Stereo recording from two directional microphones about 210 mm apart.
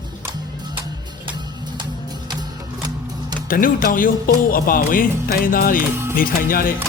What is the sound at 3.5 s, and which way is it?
A man's voice, 40° left (ahead or behind).